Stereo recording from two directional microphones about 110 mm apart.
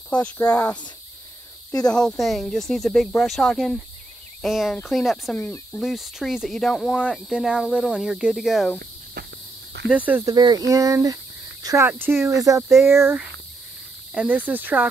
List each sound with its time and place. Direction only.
0.1 s speech: 10° left (ahead or behind)
1.7 s speech: 35° left (ahead or behind)
2.0 s speech: 5° left (ahead or behind)
9.8 s cricket: 15° right (ahead or behind)
10.2 s speech: 35° right (ahead or behind)
14.1 s cricket: 10° right (ahead or behind)